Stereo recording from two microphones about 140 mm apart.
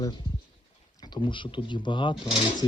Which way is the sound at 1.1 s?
35° left (ahead or behind).